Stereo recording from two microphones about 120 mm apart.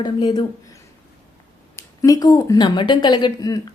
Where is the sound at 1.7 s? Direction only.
30° left (ahead or behind).